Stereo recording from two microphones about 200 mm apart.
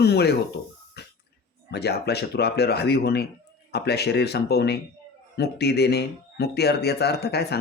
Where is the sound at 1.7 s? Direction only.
55° left (ahead or behind).